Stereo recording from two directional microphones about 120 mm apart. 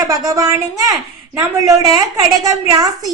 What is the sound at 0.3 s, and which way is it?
A woman's voice, 30° right (ahead or behind).